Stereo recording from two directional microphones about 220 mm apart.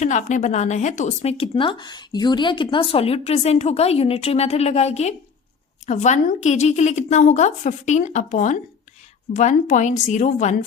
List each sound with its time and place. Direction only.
0.0 s a woman's voice: 35° left (ahead or behind)